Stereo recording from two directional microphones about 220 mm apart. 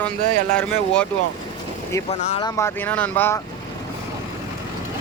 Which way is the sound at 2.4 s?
15° left (ahead or behind).